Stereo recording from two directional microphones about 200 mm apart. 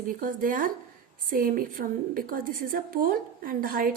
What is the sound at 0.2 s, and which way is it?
A woman's voice, 45° right (ahead or behind).